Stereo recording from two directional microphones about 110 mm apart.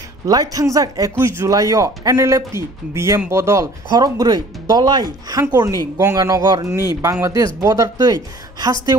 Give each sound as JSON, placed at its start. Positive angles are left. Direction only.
{"t": 0.3, "sound": "a man's voice", "side_deg": -35}